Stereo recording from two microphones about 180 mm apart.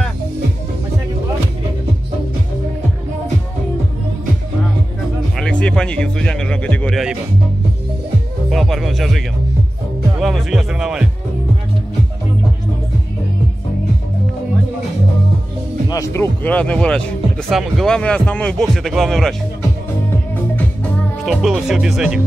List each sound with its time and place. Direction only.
5.4 s speech: 5° left (ahead or behind)
8.5 s speech: centre (ahead or behind)
15.9 s speech: 15° left (ahead or behind); by 19.3 s centre (ahead or behind)
21.2 s speech: centre (ahead or behind)